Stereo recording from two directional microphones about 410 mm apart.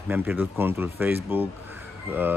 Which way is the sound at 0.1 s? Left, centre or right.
Centre.